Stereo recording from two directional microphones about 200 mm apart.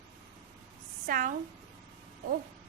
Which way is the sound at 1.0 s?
45° right (ahead or behind).